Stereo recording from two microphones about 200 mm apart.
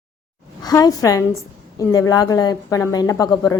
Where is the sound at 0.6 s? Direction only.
20° left (ahead or behind).